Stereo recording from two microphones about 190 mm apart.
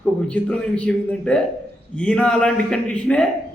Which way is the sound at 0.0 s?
5° left (ahead or behind).